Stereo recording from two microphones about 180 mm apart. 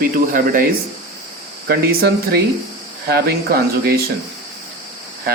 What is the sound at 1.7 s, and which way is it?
Speech, 60° right (ahead or behind).